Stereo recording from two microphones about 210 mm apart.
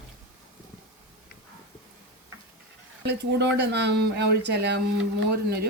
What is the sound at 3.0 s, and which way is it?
Speech, 55° right (ahead or behind).